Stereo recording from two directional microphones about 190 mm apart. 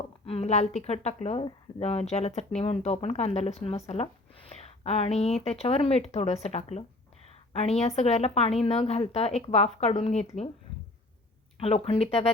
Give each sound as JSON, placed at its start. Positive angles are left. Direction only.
{"t": 0.3, "sound": "speech", "side_deg": 35}
{"t": 11.6, "sound": "speech", "side_deg": 30}